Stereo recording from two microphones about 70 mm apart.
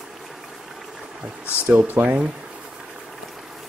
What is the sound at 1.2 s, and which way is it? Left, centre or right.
Speech, centre.